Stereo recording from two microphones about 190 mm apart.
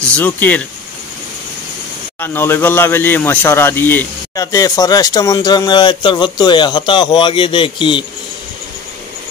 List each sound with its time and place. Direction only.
0.0 s speech: 5° left (ahead or behind)
2.1 s speech: 10° left (ahead or behind)